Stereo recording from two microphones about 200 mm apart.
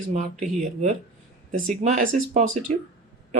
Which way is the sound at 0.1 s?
35° right (ahead or behind).